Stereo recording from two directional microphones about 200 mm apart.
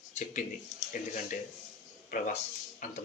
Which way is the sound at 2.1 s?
40° left (ahead or behind).